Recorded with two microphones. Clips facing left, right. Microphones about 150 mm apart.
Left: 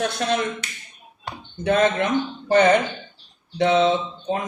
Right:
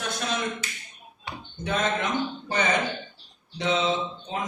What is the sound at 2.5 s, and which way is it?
Speech, 60° left (ahead or behind).